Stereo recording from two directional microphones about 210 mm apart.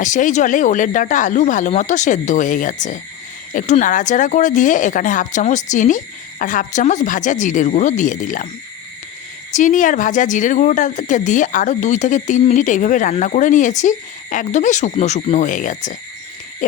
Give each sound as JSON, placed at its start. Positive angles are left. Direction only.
{"t": 0.0, "sound": "speech", "side_deg": 35}
{"t": 9.5, "sound": "speech", "side_deg": 35}